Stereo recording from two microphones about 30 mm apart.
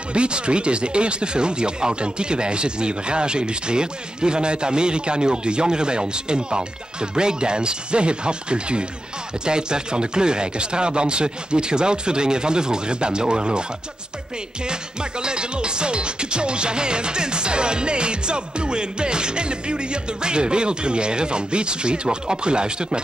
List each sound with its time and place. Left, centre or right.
0.1 s speech: right
14.7 s speech: right